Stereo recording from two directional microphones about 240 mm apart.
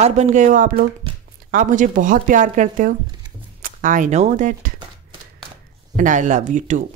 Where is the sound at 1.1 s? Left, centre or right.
Right.